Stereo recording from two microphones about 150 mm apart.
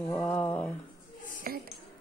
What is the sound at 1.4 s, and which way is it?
Speech, 80° right.